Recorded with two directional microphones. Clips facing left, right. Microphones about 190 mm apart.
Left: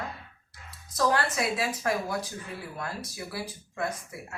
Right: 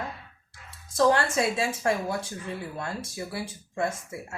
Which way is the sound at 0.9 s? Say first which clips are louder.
Right 4 dB; 25° right (ahead or behind).